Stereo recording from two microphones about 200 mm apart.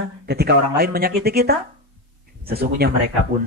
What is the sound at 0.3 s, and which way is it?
Speech, 55° right (ahead or behind).